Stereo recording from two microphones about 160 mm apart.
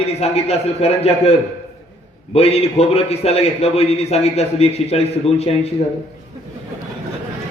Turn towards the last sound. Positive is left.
turn(degrees=40)  # may be behind; listen again after turning